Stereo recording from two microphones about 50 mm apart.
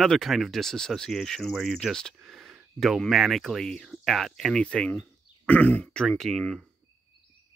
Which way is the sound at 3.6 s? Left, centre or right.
Centre.